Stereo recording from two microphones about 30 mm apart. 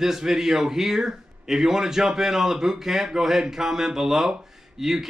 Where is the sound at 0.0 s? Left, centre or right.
Centre.